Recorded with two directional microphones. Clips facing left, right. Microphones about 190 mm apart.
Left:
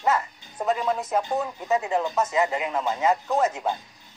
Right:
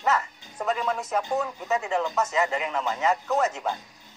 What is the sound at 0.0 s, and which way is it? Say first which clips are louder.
Speech: left 1 dB; 15° left (ahead or behind).